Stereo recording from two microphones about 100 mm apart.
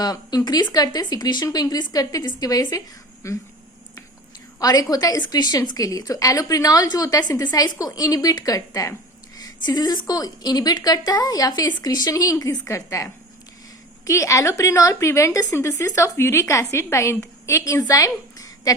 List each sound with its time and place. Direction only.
0.0 s a woman's voice: 40° left (ahead or behind)
4.6 s a woman's voice: 40° left (ahead or behind)